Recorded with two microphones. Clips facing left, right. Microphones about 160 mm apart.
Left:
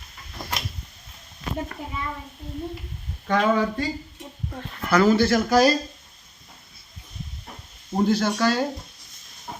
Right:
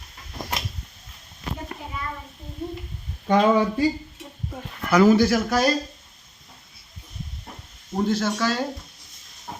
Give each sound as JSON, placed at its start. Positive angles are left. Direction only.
{"t": 0.4, "sound": "a sound", "side_deg": -15}
{"t": 1.7, "sound": "a child's voice", "side_deg": -20}
{"t": 3.2, "sound": "speech", "side_deg": -15}
{"t": 8.0, "sound": "speech", "side_deg": 0}